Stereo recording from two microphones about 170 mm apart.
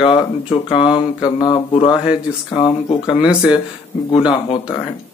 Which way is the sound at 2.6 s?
25° left (ahead or behind).